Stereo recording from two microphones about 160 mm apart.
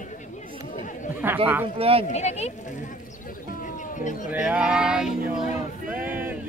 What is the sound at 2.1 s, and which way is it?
Speech, 45° left (ahead or behind).